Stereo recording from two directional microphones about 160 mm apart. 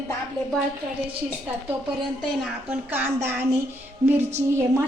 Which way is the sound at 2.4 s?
5° right (ahead or behind).